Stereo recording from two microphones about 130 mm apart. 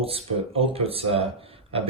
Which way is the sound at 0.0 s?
45° right (ahead or behind).